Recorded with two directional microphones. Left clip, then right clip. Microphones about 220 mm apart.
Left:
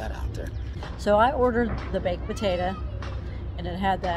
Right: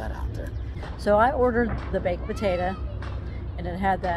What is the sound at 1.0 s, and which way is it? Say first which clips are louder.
A woman's voice: even; 10° right (ahead or behind).